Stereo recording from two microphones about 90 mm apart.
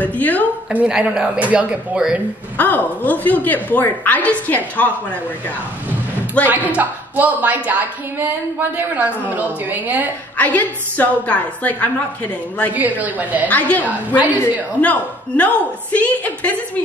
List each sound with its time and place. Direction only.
0.0 s a woman's voice: 15° left (ahead or behind)
0.7 s speech: 10° right (ahead or behind)
2.5 s a woman's voice: 20° left (ahead or behind)
6.4 s a woman's voice: 15° left (ahead or behind)
6.8 s a woman's voice: 20° right (ahead or behind)
10.3 s a woman's voice: 15° left (ahead or behind)
12.7 s speech: 15° right (ahead or behind)
13.5 s a woman's voice: 15° left (ahead or behind)
13.8 s speech: 15° right (ahead or behind)
14.8 s a woman's voice: 15° left (ahead or behind)